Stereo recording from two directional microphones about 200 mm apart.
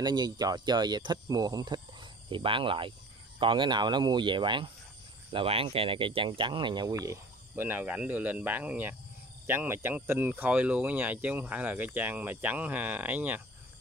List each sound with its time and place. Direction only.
0.0 s speech: 20° right (ahead or behind)